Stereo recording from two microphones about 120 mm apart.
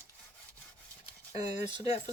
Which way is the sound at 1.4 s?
65° left (ahead or behind).